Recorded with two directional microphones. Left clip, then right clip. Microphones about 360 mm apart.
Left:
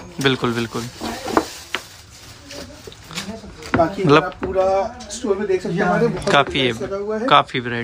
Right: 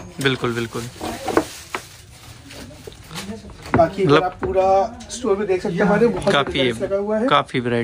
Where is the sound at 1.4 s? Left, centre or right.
Centre.